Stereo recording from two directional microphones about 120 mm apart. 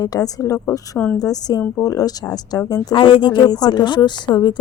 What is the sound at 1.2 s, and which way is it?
A woman's voice, 30° left (ahead or behind).